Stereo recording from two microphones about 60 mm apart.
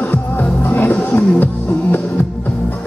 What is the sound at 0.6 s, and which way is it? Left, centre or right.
Roaring cats, left.